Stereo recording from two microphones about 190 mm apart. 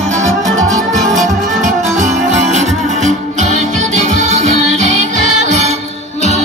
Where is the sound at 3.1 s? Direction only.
40° right (ahead or behind).